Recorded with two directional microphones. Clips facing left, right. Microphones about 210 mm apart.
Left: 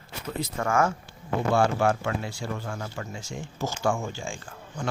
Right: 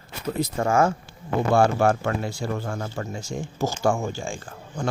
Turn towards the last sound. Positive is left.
turn(degrees=-40)  # may be behind; listen again after turning